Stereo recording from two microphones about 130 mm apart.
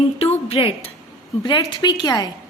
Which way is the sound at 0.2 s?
50° left (ahead or behind).